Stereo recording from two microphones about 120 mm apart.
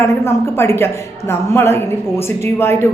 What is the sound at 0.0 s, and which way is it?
A woman's voice, 20° left (ahead or behind).